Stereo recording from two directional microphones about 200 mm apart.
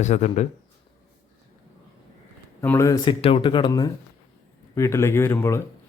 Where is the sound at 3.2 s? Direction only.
25° left (ahead or behind).